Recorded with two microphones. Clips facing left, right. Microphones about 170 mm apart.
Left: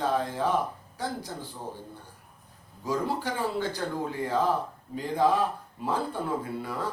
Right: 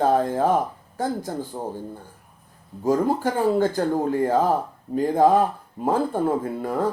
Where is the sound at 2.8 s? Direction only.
45° right (ahead or behind).